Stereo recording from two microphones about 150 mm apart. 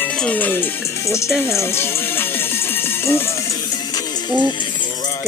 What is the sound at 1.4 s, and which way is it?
Speech, 15° left (ahead or behind).